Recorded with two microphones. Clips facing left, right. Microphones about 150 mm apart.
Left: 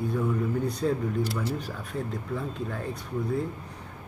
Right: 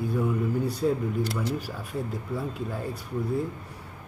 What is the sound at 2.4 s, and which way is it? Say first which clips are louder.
Speech: right 1 dB; 10° right (ahead or behind).